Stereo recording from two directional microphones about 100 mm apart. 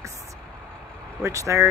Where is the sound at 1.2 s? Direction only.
30° right (ahead or behind).